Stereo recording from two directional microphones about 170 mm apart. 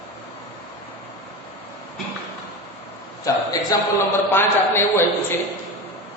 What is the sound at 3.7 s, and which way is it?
A man's voice, 20° left (ahead or behind).